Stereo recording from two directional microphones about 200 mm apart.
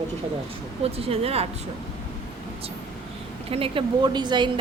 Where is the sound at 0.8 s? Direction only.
30° right (ahead or behind).